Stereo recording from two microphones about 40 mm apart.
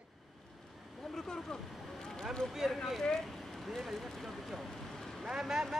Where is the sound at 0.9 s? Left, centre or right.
Centre.